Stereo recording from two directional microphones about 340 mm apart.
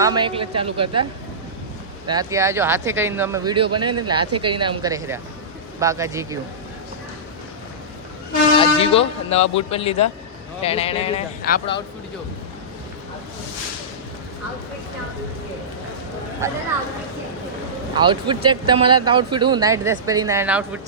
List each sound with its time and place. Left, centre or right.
0.0 s speech: centre
2.0 s speech: centre
8.5 s speech: centre
17.9 s speech: centre